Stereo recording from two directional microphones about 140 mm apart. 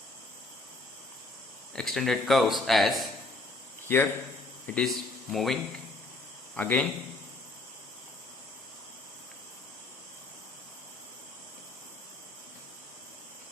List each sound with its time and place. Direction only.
1.7 s a man's voice: centre (ahead or behind)
3.8 s a man's voice: 15° left (ahead or behind)